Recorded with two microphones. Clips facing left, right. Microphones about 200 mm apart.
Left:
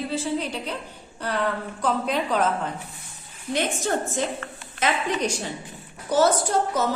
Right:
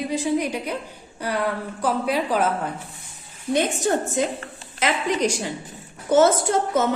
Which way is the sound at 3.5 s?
15° right (ahead or behind).